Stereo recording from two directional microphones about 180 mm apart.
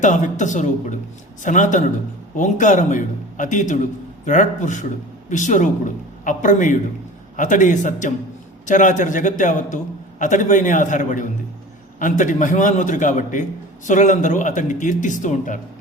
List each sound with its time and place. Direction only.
0.0 s a man's voice: 45° left (ahead or behind)